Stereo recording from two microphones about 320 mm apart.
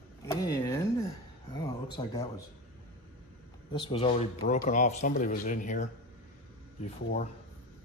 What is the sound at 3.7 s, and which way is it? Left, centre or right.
Speech, centre.